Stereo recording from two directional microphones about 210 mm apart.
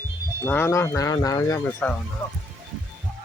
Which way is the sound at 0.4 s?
10° left (ahead or behind).